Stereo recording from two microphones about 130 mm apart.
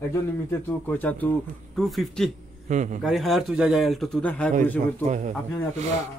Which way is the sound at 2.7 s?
70° right (ahead or behind).